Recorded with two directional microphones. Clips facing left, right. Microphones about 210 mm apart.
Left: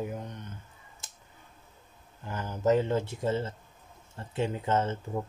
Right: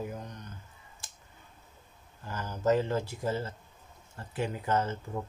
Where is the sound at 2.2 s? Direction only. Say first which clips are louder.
Left 2 dB; 20° left (ahead or behind).